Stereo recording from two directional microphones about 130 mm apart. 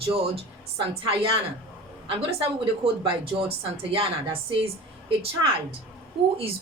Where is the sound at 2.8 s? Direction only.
45° right (ahead or behind).